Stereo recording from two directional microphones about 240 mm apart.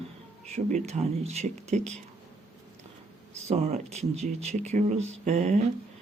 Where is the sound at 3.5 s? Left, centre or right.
Right.